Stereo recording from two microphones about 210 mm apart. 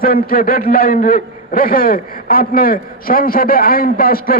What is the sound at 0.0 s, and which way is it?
A man's voice, 45° left (ahead or behind).